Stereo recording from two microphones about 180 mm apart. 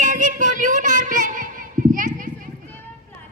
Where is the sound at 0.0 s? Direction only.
45° right (ahead or behind).